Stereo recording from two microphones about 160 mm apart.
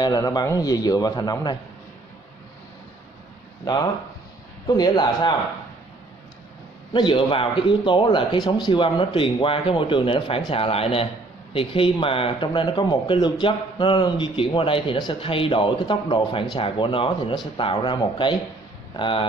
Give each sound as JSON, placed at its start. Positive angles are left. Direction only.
{"t": 0.0, "sound": "a man's voice", "side_deg": 25}
{"t": 3.6, "sound": "a man's voice", "side_deg": 25}
{"t": 6.9, "sound": "speech", "side_deg": 30}